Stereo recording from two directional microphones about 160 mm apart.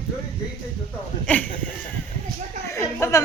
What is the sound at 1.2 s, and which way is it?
Speech, 10° left (ahead or behind).